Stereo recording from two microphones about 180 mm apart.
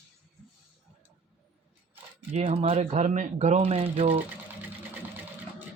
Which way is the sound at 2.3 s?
35° right (ahead or behind).